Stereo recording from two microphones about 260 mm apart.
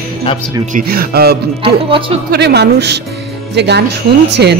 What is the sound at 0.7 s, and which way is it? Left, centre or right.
Speech, right.